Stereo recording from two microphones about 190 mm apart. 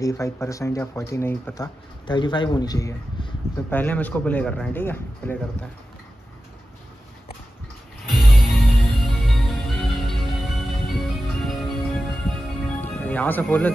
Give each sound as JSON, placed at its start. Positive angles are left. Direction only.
{"t": 0.0, "sound": "speech", "side_deg": 15}
{"t": 3.7, "sound": "speech", "side_deg": 10}
{"t": 8.1, "sound": "music", "side_deg": 0}